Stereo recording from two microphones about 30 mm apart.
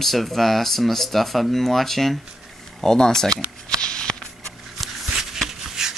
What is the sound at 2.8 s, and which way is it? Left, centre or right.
Speech, centre.